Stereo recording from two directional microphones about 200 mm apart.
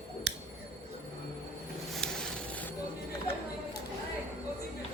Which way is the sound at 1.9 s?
Centre (ahead or behind).